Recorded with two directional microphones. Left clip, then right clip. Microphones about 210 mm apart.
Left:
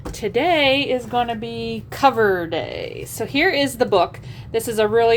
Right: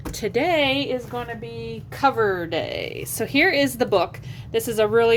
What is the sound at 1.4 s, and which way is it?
Speech, 30° left (ahead or behind).